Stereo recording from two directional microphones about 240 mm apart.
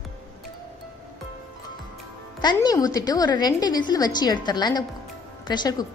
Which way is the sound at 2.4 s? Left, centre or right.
Centre.